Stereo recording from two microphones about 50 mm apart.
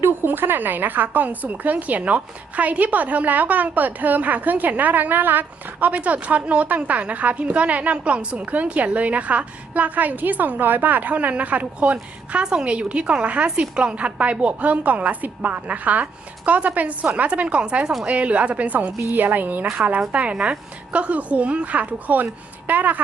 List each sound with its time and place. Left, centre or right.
0.0 s a woman's voice: right